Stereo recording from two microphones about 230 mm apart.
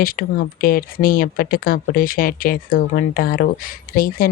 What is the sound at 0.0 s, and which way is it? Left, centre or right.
Speech, left.